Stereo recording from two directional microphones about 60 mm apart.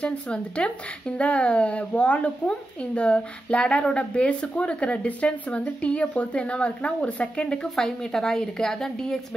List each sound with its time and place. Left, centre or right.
0.0 s speech: centre